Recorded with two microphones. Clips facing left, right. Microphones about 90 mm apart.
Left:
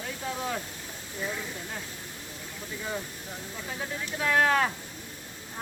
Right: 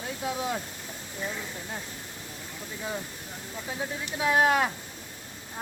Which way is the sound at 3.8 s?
15° right (ahead or behind).